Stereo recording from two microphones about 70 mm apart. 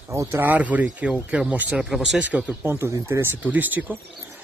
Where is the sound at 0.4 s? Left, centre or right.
Right.